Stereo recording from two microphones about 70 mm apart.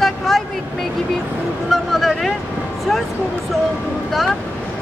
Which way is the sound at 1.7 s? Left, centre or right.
Centre.